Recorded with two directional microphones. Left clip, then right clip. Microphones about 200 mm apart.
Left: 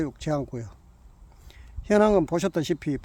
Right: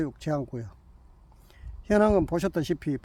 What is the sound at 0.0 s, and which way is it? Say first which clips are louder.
Speech: left 2 dB; 10° left (ahead or behind).